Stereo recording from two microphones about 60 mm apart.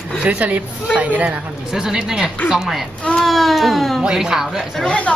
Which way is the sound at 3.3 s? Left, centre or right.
Centre.